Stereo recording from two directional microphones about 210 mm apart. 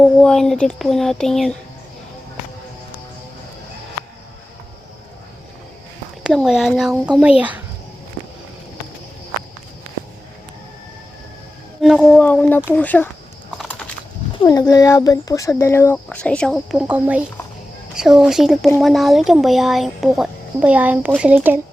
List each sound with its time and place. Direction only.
0.2 s speech: 5° left (ahead or behind)
6.2 s speech: centre (ahead or behind)
11.8 s speech: centre (ahead or behind)
13.6 s a sound: centre (ahead or behind)
14.3 s speech: 15° left (ahead or behind); by 21.6 s 10° right (ahead or behind)